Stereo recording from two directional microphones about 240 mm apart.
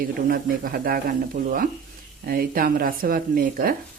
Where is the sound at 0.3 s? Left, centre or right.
Right.